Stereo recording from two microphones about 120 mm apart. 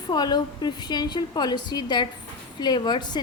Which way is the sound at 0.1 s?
35° left (ahead or behind).